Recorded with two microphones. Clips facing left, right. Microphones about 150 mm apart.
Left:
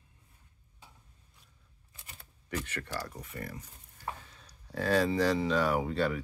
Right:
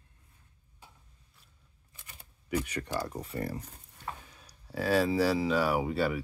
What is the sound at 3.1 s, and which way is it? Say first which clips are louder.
Speech: right 7 dB; 30° right (ahead or behind).